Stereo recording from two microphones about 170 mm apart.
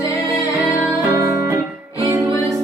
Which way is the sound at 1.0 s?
15° right (ahead or behind).